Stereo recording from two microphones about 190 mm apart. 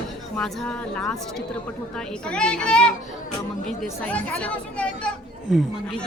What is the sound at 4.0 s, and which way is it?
A woman's voice, 5° left (ahead or behind).